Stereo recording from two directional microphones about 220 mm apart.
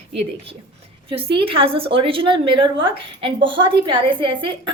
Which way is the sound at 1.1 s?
25° right (ahead or behind).